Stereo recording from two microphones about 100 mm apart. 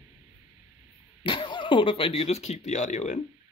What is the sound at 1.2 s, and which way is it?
Speech, 55° left (ahead or behind).